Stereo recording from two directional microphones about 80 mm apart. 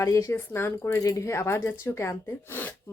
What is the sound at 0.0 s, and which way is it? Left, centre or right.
Speech, left.